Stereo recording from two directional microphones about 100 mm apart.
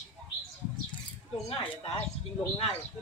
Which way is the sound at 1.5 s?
70° left (ahead or behind).